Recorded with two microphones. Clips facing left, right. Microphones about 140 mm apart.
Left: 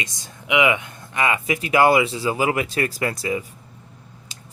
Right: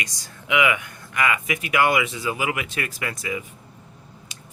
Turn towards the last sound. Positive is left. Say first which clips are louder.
# left 5 dB
turn(degrees=35)  # may be behind; listen again after turning